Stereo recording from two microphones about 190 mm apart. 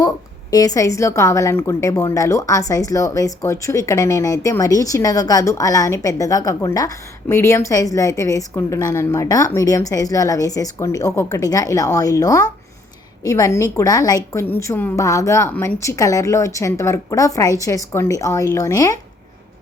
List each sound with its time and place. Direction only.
0.5 s a woman's voice: 20° left (ahead or behind)